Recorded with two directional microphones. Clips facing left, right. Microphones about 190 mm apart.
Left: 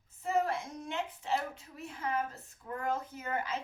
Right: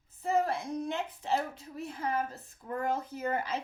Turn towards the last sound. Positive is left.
turn(degrees=-35)  # may be behind; listen again after turning